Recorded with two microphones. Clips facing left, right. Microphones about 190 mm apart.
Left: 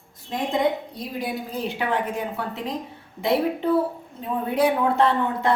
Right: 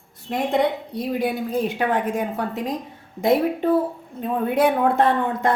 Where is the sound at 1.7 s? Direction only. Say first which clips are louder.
Right 3 dB; 45° right (ahead or behind).